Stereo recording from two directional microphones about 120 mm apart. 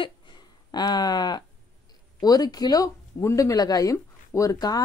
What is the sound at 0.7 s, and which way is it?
Speech, 35° left (ahead or behind).